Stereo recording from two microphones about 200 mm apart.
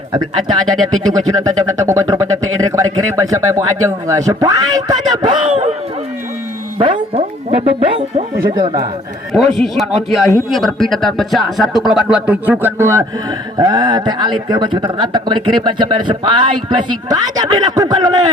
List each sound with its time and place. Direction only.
1.1 s speech: 15° right (ahead or behind)
6.7 s music: 30° right (ahead or behind)
9.3 s speech: centre (ahead or behind); by 18.2 s 20° right (ahead or behind)